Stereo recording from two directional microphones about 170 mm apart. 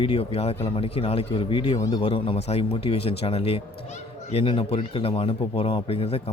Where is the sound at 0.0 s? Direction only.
35° left (ahead or behind).